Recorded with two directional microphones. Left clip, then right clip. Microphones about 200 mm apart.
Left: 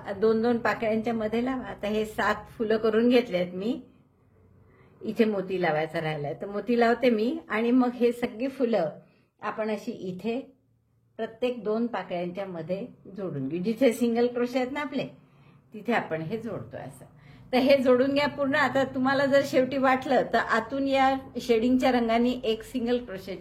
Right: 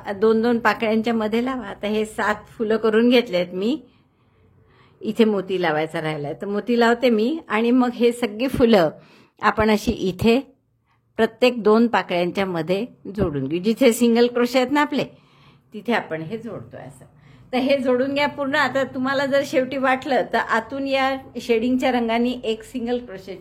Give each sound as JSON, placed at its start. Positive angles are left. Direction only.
{"t": 0.0, "sound": "a woman's voice", "side_deg": -20}
{"t": 5.0, "sound": "a woman's voice", "side_deg": -25}
{"t": 8.5, "sound": "a woman's voice", "side_deg": -50}
{"t": 15.8, "sound": "a woman's voice", "side_deg": -15}